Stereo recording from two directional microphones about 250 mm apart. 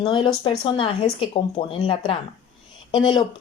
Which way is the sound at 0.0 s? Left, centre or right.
Centre.